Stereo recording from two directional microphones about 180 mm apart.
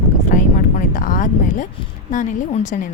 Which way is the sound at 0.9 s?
50° left (ahead or behind).